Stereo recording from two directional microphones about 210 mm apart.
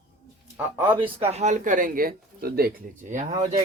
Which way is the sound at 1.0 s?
30° right (ahead or behind).